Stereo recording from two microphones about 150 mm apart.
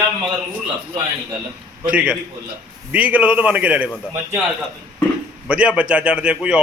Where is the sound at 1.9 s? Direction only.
5° right (ahead or behind).